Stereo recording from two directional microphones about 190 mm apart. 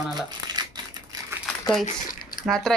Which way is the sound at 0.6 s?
20° right (ahead or behind).